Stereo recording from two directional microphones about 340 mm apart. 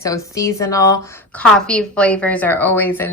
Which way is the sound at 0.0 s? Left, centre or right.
Centre.